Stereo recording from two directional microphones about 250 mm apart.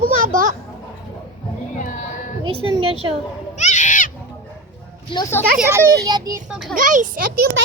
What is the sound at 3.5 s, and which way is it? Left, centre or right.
Goat, left.